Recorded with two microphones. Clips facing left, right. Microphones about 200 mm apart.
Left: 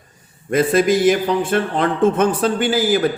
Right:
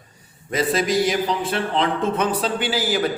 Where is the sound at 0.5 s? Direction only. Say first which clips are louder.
Left 5 dB; 50° left (ahead or behind).